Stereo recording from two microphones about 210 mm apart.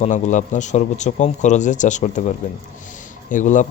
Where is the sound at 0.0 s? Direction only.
35° left (ahead or behind).